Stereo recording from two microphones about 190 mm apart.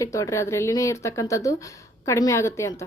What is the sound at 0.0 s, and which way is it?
Speech, 15° left (ahead or behind).